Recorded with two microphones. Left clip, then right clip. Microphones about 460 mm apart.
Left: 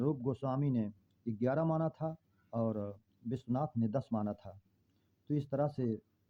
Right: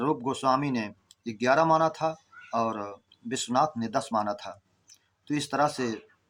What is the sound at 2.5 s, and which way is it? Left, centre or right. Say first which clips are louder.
Speech: right 9 dB; left.